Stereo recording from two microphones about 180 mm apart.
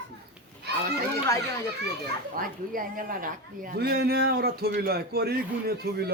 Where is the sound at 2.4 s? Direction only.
55° right (ahead or behind).